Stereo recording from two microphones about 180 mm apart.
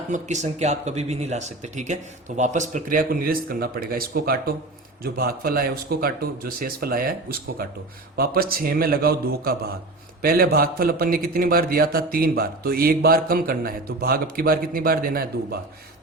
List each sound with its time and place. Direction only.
0.1 s a man's voice: 40° right (ahead or behind); by 15.5 s 55° right (ahead or behind)